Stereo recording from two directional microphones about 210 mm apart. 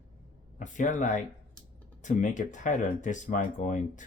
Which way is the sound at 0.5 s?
35° left (ahead or behind).